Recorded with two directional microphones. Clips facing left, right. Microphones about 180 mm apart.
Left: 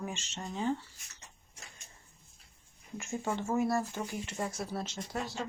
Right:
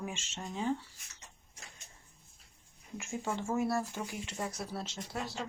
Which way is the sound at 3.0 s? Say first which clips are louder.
Left 2 dB; centre (ahead or behind).